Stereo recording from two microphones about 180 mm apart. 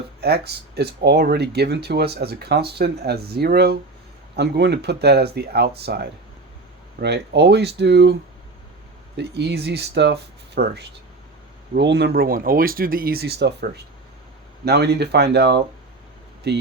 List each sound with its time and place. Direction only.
0.2 s speech: 65° right (ahead or behind)
9.1 s speech: 70° right (ahead or behind)